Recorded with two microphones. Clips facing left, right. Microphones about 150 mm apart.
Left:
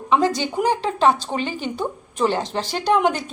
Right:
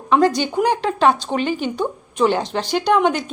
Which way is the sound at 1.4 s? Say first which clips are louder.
Right 5 dB; 30° left (ahead or behind).